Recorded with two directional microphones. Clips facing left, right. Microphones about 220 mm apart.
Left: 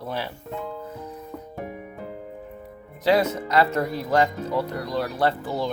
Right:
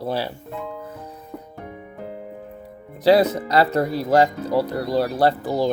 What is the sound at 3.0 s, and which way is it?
Speech, 35° right (ahead or behind).